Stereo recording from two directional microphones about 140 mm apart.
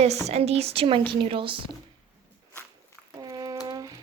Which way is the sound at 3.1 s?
25° right (ahead or behind).